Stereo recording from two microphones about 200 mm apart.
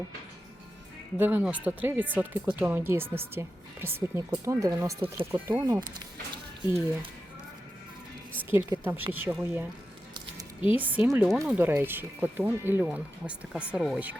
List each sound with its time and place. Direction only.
1.2 s speech: 10° right (ahead or behind)
8.4 s speech: 10° right (ahead or behind)
10.8 s speech: 10° right (ahead or behind)